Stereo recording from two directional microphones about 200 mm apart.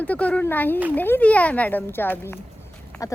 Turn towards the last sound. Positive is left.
turn(degrees=5)  # may be behind; listen again after turning